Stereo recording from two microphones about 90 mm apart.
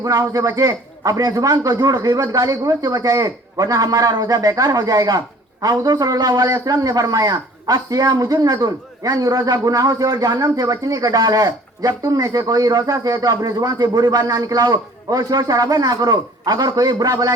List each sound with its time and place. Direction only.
0.0 s a man's voice: 40° right (ahead or behind)